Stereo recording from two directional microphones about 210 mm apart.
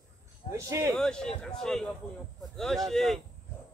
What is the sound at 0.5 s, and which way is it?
Speech, 15° right (ahead or behind).